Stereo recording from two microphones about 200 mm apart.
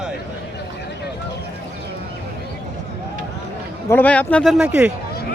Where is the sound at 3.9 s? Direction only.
10° left (ahead or behind).